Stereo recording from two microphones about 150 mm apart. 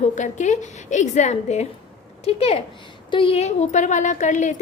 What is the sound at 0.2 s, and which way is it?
A woman's voice, 55° left (ahead or behind).